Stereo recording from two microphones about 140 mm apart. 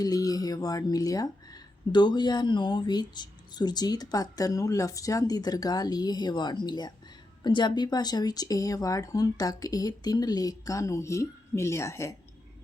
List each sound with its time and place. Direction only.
0.0 s speech: 25° left (ahead or behind)